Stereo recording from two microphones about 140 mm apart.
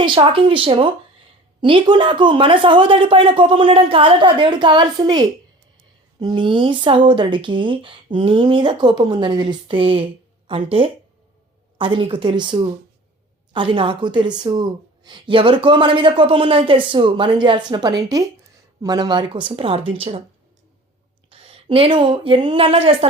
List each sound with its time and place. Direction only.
0.0 s speech: 35° right (ahead or behind)
21.2 s speech: 40° right (ahead or behind)